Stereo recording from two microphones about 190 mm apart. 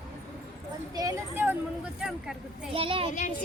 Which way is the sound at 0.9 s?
20° right (ahead or behind).